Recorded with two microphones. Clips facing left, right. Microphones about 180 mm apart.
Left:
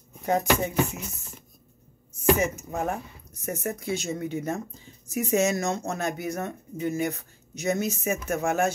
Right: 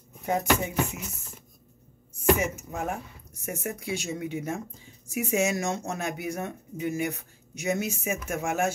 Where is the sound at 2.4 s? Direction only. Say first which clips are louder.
Left 3 dB; 5° right (ahead or behind).